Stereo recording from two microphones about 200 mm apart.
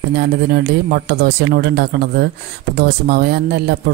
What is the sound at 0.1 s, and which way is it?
Speech, 55° right (ahead or behind).